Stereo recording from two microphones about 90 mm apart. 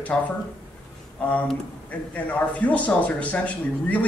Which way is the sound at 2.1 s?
15° left (ahead or behind).